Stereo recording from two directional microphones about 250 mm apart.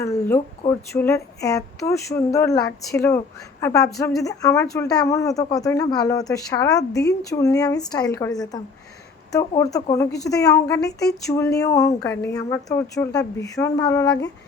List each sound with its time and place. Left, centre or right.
0.0 s speech: centre
10.8 s speech: left
11.1 s speech: centre